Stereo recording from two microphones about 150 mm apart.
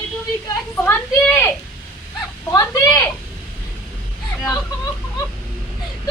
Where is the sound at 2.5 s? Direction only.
20° left (ahead or behind).